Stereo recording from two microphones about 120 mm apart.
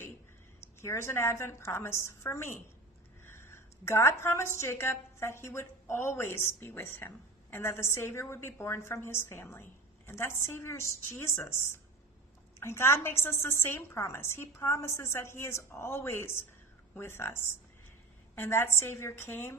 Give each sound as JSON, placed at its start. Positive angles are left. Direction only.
{"t": 0.6, "sound": "a woman's voice", "side_deg": 20}